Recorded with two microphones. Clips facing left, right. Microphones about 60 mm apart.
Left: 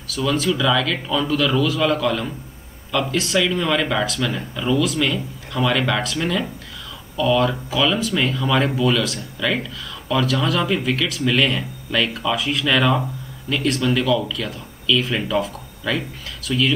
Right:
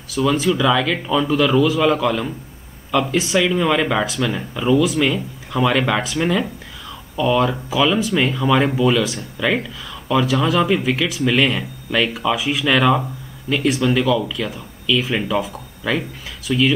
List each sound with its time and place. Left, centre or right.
0.1 s speech: centre